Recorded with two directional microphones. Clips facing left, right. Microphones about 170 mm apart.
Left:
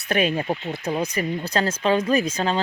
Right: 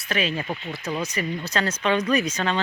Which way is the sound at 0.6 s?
20° left (ahead or behind).